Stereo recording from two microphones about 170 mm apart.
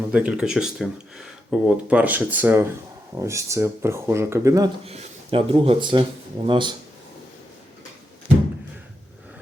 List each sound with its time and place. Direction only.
0.1 s speech: 5° right (ahead or behind)
4.9 s speech: 35° right (ahead or behind)